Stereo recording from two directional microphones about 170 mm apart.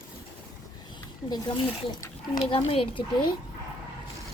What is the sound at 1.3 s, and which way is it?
Speech, 30° left (ahead or behind).